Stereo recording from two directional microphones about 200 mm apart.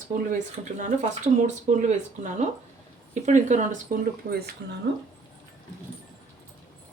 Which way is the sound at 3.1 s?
35° right (ahead or behind).